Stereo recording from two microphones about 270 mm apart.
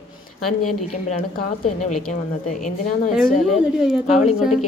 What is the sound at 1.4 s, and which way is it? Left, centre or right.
A woman's voice, left.